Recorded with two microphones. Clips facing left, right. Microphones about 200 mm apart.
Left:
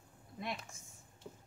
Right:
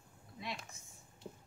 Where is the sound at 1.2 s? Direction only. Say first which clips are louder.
Right 2 dB; 25° right (ahead or behind).